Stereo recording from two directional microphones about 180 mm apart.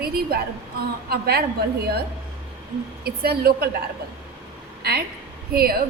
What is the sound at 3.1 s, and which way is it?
Speech, 60° right (ahead or behind).